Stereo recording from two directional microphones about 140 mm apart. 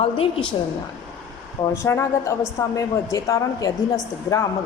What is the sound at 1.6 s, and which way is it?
A woman's voice, 20° left (ahead or behind).